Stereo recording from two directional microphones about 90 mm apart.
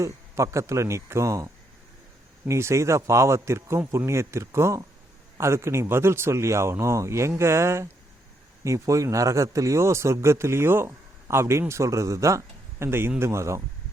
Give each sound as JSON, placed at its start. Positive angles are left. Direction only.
{"t": 0.0, "sound": "speech", "side_deg": -35}
{"t": 2.5, "sound": "speech", "side_deg": -30}